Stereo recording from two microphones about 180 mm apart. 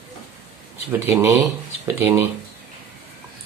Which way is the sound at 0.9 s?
15° right (ahead or behind).